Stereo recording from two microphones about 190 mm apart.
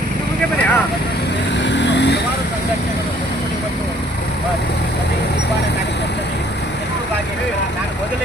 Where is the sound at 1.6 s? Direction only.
70° left (ahead or behind).